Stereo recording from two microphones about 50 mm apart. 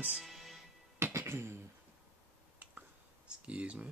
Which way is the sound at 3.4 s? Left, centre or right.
Right.